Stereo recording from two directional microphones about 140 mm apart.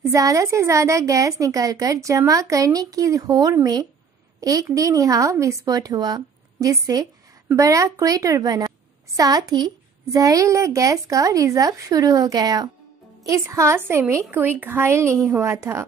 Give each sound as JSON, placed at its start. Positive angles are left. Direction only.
{"t": 0.1, "sound": "a woman's voice", "side_deg": -25}